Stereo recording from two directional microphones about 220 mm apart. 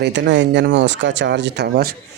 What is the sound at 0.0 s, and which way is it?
Speech, 55° right (ahead or behind).